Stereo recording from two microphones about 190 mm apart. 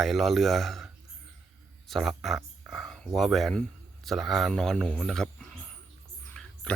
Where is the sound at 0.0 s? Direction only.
Centre (ahead or behind).